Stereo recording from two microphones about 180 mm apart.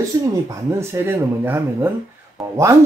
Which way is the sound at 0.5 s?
15° right (ahead or behind).